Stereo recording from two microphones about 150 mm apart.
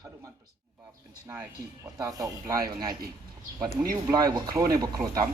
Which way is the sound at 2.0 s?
20° right (ahead or behind).